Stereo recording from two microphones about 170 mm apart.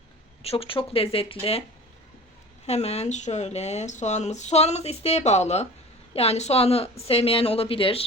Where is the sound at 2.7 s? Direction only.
40° left (ahead or behind).